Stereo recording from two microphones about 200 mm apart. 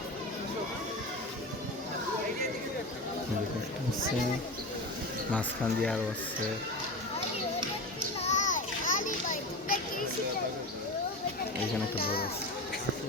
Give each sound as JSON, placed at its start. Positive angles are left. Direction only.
{"t": 5.3, "sound": "speech", "side_deg": 5}
{"t": 8.2, "sound": "children playing", "side_deg": 35}
{"t": 12.0, "sound": "speech", "side_deg": 50}